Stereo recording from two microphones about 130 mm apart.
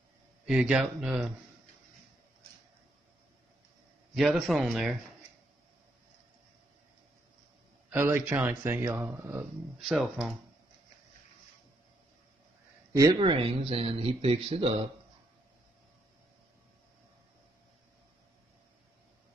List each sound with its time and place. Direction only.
0.5 s speech: 5° right (ahead or behind)
4.1 s speech: 5° right (ahead or behind)
7.9 s speech: 20° right (ahead or behind)
9.8 s speech: centre (ahead or behind)
12.9 s speech: 30° right (ahead or behind); by 14.9 s 50° right (ahead or behind)